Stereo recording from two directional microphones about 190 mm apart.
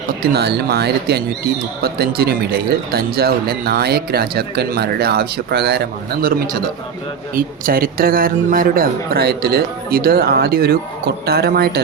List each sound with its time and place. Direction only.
0.2 s speech: 60° right (ahead or behind)